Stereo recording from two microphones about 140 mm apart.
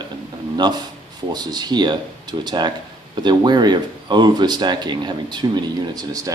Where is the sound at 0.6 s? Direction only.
30° right (ahead or behind).